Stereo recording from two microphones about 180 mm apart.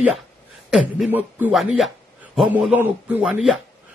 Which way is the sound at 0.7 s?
5° right (ahead or behind).